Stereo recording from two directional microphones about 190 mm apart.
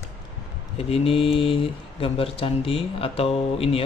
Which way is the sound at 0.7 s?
30° left (ahead or behind).